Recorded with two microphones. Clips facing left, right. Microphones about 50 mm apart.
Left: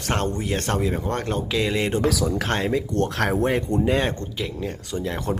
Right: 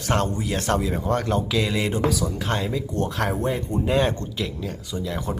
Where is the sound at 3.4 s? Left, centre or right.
Left.